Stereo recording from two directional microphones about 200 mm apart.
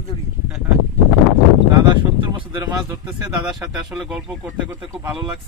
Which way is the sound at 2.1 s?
25° right (ahead or behind).